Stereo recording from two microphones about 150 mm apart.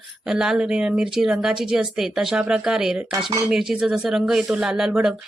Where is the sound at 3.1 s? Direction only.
30° right (ahead or behind).